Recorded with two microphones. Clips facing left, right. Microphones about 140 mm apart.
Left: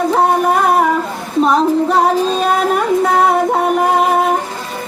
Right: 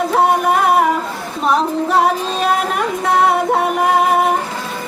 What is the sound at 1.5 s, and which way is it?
Music, centre (ahead or behind).